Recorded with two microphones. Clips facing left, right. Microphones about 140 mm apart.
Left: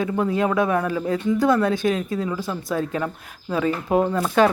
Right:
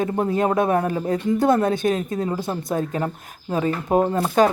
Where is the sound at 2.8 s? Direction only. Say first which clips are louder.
Right 1 dB; 35° right (ahead or behind).